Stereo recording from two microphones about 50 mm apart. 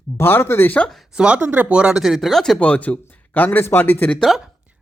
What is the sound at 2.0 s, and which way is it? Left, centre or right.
Speech, centre.